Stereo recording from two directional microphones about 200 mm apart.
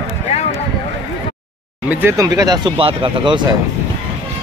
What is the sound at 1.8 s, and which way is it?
Speech, 10° right (ahead or behind).